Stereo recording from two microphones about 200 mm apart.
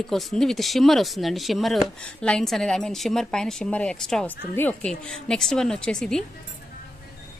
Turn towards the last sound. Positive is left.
turn(degrees=5)  # may be behind; listen again after turning